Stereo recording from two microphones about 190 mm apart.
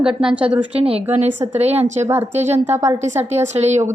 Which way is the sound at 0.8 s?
30° right (ahead or behind).